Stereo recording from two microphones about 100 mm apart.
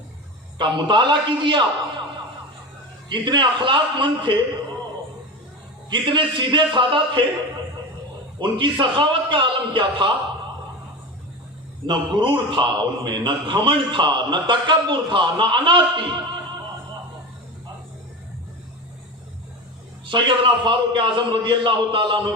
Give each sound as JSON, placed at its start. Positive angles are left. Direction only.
{"t": 0.6, "sound": "a man's voice", "side_deg": -50}
{"t": 3.1, "sound": "a man's voice", "side_deg": -50}
{"t": 5.9, "sound": "a man's voice", "side_deg": -55}
{"t": 8.4, "sound": "a man's voice", "side_deg": -50}
{"t": 11.9, "sound": "a man's voice", "side_deg": -55}
{"t": 20.1, "sound": "a man's voice", "side_deg": -55}